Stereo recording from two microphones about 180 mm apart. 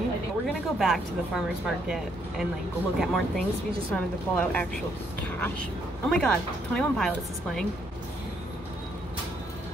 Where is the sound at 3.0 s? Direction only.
Centre (ahead or behind).